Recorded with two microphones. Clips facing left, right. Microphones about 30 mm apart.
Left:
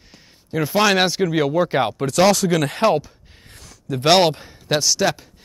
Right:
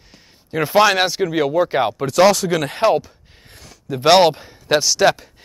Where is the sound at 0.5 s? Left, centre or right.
Centre.